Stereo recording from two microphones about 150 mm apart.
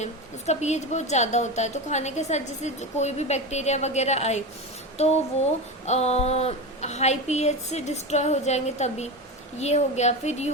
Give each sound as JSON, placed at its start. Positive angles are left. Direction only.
{"t": 0.0, "sound": "a woman's voice", "side_deg": 50}
{"t": 5.8, "sound": "a woman's voice", "side_deg": 45}